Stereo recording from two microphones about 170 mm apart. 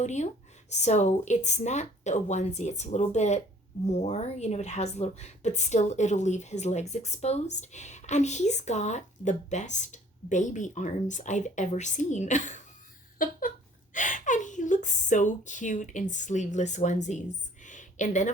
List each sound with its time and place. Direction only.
0.0 s a woman's voice: 45° left (ahead or behind)
13.1 s a sound: 55° left (ahead or behind)
13.9 s a woman's voice: 50° left (ahead or behind)